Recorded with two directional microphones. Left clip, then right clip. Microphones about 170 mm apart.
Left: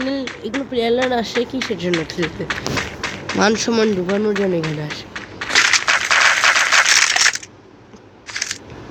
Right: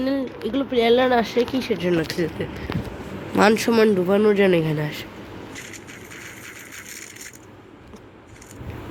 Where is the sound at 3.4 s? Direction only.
Centre (ahead or behind).